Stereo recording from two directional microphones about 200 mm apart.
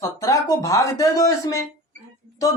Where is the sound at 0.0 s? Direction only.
15° left (ahead or behind).